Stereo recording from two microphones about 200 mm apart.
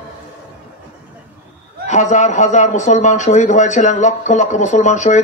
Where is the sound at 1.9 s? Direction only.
35° left (ahead or behind).